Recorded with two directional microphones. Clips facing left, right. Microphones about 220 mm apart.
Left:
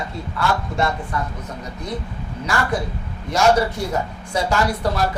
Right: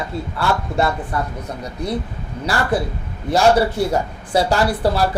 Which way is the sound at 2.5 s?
35° right (ahead or behind).